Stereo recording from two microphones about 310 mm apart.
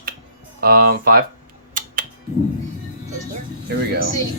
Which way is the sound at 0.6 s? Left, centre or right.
Right.